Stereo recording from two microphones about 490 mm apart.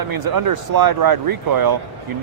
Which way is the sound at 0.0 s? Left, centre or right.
Right.